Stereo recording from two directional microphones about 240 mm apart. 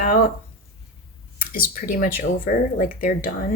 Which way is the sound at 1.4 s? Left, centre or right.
Left.